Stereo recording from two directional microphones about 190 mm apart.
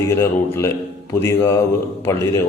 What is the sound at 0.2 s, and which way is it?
A man's voice, 15° left (ahead or behind).